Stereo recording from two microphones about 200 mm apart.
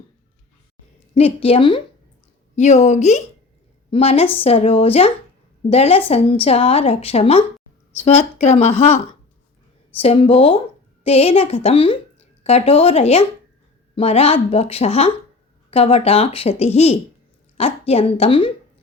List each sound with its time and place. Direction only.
1.1 s speech: 30° left (ahead or behind)